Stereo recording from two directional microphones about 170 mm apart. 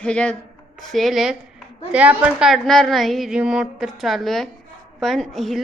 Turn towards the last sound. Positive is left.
turn(degrees=0)  # may be behind; listen again after turning